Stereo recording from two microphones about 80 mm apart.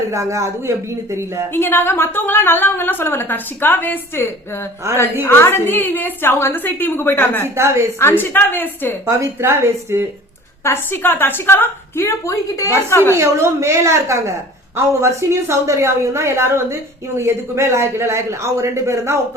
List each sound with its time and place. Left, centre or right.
0.1 s a man's voice: right
1.5 s a woman's voice: left
4.8 s a man's voice: right
5.2 s a woman's voice: left
7.4 s a man's voice: right
7.9 s a woman's voice: left
9.0 s a man's voice: right
10.6 s a woman's voice: left
13.1 s a man's voice: right